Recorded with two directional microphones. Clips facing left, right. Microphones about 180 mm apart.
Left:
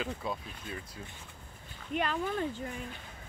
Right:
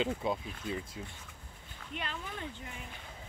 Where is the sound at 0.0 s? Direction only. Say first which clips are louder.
Right 4 dB; 20° right (ahead or behind).